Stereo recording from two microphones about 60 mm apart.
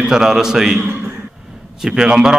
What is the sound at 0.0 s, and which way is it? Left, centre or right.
Speech, centre.